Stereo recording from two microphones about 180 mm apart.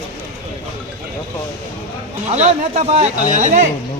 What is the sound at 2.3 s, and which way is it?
Speech, 40° right (ahead or behind).